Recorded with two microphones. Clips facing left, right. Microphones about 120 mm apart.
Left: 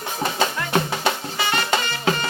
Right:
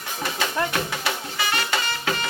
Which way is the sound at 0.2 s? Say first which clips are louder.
Left 1 dB; 30° left (ahead or behind).